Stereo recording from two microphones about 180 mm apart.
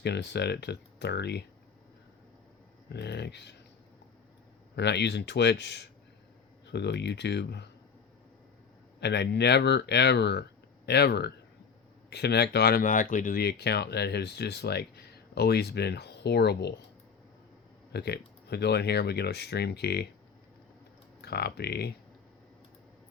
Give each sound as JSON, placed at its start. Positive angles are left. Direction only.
{"t": 0.0, "sound": "speech", "side_deg": 70}
{"t": 2.9, "sound": "speech", "side_deg": 70}
{"t": 4.7, "sound": "speech", "side_deg": 70}
{"t": 9.0, "sound": "speech", "side_deg": 70}
{"t": 17.9, "sound": "speech", "side_deg": 65}
{"t": 21.2, "sound": "speech", "side_deg": 65}